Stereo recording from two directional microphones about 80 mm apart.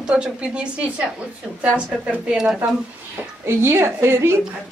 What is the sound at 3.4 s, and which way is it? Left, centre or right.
Speech, right.